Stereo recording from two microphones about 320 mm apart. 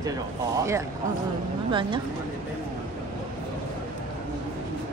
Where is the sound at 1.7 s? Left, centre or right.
Centre.